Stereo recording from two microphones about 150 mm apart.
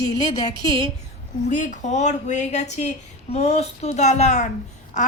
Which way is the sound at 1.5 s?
60° left (ahead or behind).